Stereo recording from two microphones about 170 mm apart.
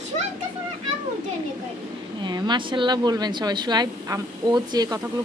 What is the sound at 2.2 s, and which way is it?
A woman's voice, 25° right (ahead or behind).